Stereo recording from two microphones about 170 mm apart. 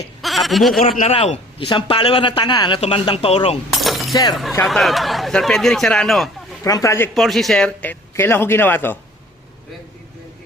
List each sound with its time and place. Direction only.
0.2 s a sound: centre (ahead or behind)
1.0 s speech: 35° left (ahead or behind)
3.7 s shatter: centre (ahead or behind)
4.1 s speech: 20° left (ahead or behind)
4.6 s speech: centre (ahead or behind)
6.7 s a man's voice: 20° left (ahead or behind)
7.1 s a man's voice: centre (ahead or behind)